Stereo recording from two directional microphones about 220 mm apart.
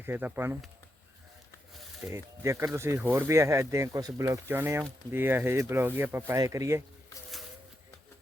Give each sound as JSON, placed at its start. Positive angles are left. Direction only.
{"t": 0.0, "sound": "speech", "side_deg": -10}
{"t": 2.0, "sound": "speech", "side_deg": -10}